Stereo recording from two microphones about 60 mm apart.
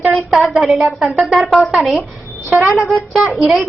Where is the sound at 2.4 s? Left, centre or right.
Centre.